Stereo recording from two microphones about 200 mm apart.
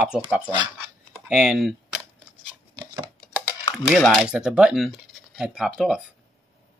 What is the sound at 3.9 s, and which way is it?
Speech, centre (ahead or behind).